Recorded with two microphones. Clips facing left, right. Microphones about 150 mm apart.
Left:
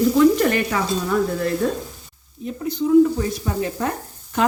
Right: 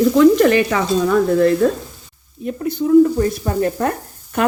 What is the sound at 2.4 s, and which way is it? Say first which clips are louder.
Speech: right 3 dB; 55° right (ahead or behind).